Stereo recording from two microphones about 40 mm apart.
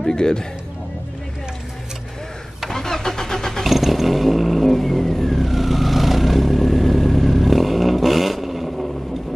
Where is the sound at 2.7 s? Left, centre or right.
Centre.